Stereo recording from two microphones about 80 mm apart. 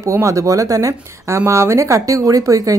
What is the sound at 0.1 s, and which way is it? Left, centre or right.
Speech, right.